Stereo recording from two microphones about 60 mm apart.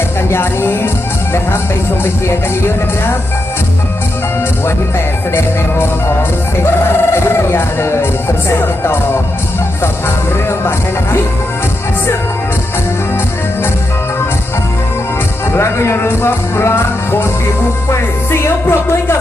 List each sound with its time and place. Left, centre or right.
0.3 s music: left
7.1 s music: left
15.5 s music: left